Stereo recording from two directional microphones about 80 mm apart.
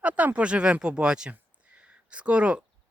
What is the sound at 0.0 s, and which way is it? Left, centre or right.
Speech, right.